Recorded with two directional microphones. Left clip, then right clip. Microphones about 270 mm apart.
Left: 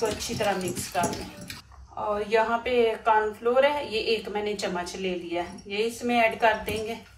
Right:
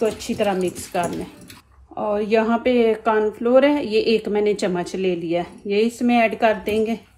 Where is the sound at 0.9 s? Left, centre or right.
Right.